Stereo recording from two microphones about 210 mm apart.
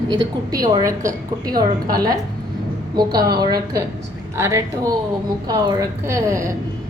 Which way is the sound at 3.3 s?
20° right (ahead or behind).